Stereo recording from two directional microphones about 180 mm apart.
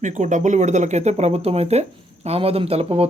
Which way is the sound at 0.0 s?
45° right (ahead or behind).